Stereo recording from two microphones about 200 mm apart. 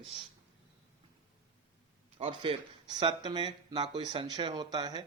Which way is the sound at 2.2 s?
25° right (ahead or behind).